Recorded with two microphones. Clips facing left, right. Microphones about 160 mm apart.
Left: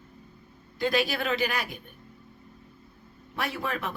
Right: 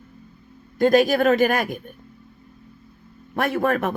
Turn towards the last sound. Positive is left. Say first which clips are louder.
# right 10 dB
turn(degrees=-50)  # may be behind; listen again after turning